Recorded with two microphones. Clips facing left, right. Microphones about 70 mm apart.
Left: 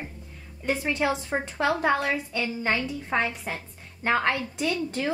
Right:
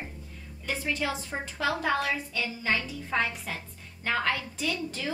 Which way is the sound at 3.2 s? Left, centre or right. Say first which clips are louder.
Left 2 dB; left.